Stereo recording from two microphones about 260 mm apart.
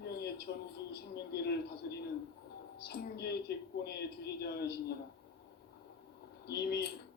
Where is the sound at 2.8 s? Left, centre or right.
Left.